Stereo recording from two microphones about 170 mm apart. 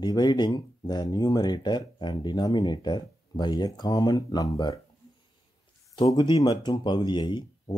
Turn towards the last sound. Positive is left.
turn(degrees=25)  # may be behind; listen again after turning